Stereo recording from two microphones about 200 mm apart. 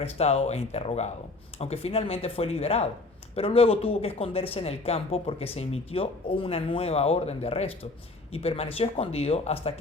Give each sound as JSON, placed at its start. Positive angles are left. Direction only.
{"t": 0.0, "sound": "speech", "side_deg": 30}